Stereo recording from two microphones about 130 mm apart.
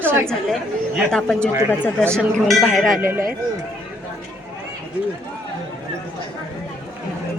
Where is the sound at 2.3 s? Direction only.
Centre (ahead or behind).